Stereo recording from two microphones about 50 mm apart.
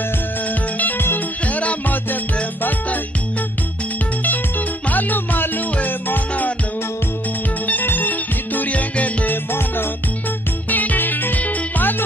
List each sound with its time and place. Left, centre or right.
0.5 s music: left
4.2 s music: left
7.8 s music: left
9.5 s music: left
10.7 s music: left